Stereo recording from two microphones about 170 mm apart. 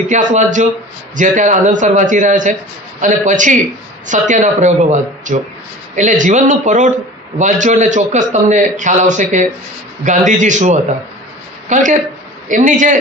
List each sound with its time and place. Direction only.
0.1 s a man's voice: 45° right (ahead or behind)